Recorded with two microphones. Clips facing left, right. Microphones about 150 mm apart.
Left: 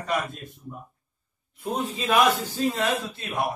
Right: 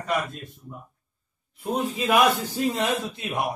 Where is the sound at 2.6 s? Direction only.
15° right (ahead or behind).